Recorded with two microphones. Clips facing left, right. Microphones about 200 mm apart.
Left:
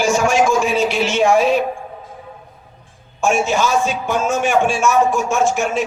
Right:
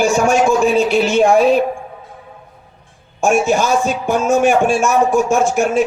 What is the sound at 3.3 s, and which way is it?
Speech, 55° right (ahead or behind).